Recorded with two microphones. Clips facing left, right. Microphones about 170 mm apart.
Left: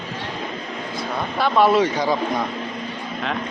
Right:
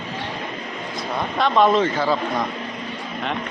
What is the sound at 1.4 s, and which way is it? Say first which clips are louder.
Speech: left 1 dB; 5° left (ahead or behind).